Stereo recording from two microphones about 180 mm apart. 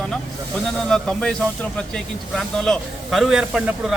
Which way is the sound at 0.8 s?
Centre (ahead or behind).